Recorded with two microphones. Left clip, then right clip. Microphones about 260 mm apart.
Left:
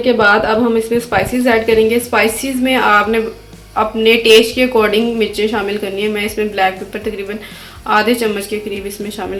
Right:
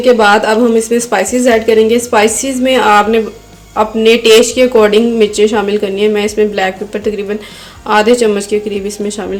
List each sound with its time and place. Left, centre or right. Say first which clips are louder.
0.0 s speech: right 4 dB; right